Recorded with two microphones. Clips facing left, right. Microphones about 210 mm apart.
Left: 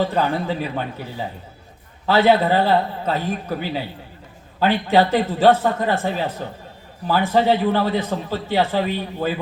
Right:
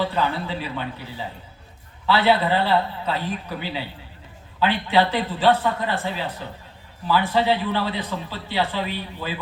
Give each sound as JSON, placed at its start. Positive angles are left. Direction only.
{"t": 0.0, "sound": "a man's voice", "side_deg": 45}